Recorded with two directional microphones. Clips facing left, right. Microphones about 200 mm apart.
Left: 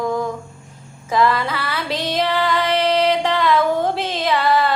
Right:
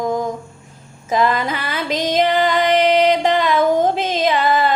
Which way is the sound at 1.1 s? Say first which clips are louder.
Even; 20° right (ahead or behind).